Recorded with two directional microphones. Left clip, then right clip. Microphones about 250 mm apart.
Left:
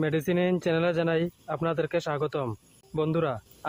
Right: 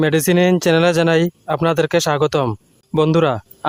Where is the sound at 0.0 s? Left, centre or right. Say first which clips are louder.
Right 11 dB; right.